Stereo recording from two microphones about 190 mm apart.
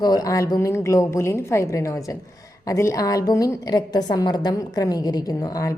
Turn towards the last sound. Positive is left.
turn(degrees=15)  # may be behind; listen again after turning